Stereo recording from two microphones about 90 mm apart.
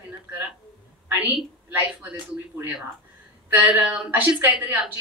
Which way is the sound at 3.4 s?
20° right (ahead or behind).